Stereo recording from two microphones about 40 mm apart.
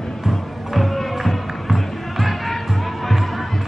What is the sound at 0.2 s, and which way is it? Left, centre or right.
Music, centre.